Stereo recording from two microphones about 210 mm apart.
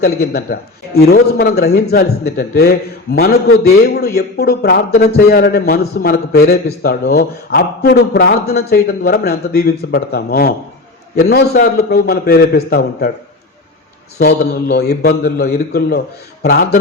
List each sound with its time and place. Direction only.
0.0 s a man's voice: 50° left (ahead or behind)
14.2 s a man's voice: 50° left (ahead or behind)